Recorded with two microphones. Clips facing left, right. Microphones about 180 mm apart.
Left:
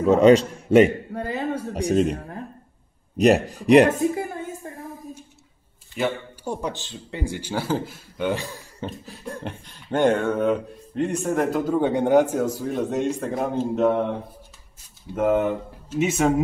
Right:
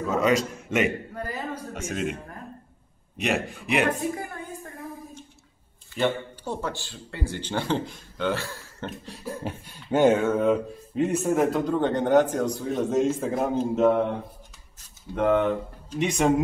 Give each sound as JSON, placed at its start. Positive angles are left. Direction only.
{"t": 0.0, "sound": "a man's voice", "side_deg": 30}
{"t": 4.1, "sound": "a sound", "side_deg": 25}
{"t": 5.9, "sound": "speech", "side_deg": 10}
{"t": 8.3, "sound": "speech", "side_deg": 15}
{"t": 8.8, "sound": "speech", "side_deg": 0}
{"t": 15.1, "sound": "speech", "side_deg": 5}